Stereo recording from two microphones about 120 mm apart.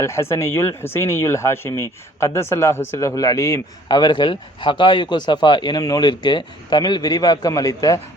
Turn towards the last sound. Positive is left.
turn(degrees=30)  # may be behind; listen again after turning